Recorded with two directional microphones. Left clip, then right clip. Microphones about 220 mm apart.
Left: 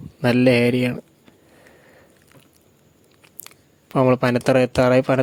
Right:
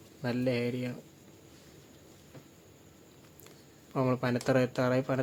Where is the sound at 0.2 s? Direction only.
45° left (ahead or behind).